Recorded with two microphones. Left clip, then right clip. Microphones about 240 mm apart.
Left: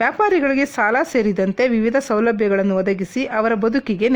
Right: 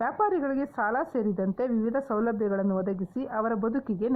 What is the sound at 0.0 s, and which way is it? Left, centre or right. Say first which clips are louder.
A woman's voice: left 10 dB; left.